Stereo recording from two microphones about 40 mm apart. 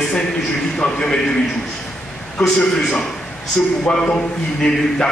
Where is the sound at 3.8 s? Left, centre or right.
Left.